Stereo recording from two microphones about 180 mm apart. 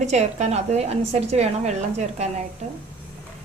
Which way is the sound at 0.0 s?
40° right (ahead or behind).